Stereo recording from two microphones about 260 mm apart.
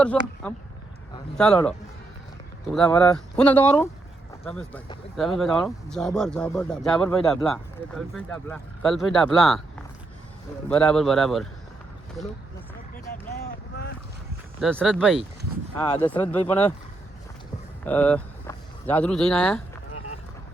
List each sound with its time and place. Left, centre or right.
0.0 s speech: centre
2.7 s speech: centre
14.6 s speech: centre
15.8 s speech: centre
17.8 s speech: centre
19.9 s boat: left